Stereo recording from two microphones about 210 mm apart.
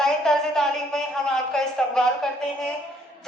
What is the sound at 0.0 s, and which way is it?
A man's voice, centre (ahead or behind).